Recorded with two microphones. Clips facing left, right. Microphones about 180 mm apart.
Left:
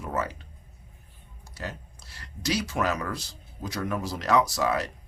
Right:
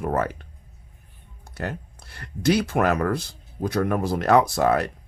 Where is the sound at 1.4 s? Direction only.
60° right (ahead or behind).